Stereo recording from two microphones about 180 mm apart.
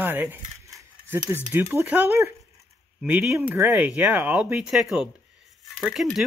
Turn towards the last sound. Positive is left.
turn(degrees=0)  # may be behind; listen again after turning